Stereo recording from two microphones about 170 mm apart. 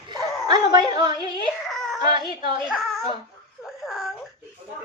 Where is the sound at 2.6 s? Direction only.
Centre (ahead or behind).